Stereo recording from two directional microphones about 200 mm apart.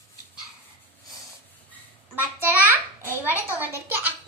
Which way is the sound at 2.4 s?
10° right (ahead or behind).